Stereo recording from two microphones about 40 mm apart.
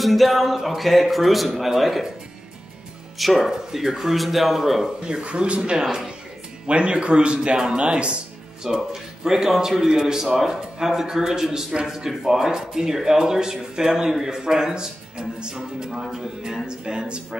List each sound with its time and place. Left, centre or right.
0.0 s speech: centre
3.2 s a man's voice: centre
5.0 s speech: right
8.6 s a man's voice: centre